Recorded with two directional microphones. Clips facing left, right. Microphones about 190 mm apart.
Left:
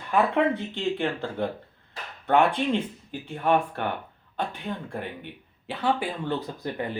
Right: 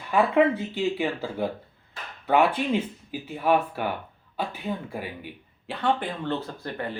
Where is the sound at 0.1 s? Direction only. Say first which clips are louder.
Right 2 dB; 5° right (ahead or behind).